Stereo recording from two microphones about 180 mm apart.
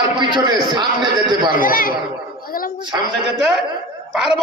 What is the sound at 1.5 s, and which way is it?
Speech, 50° left (ahead or behind).